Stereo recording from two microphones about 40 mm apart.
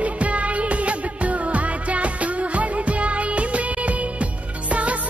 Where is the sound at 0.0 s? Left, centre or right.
Right.